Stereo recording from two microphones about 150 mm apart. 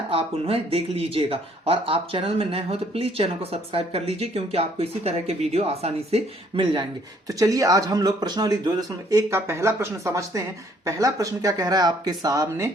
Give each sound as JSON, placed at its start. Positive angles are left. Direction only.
{"t": 0.1, "sound": "speech", "side_deg": -40}
{"t": 7.3, "sound": "speech", "side_deg": -20}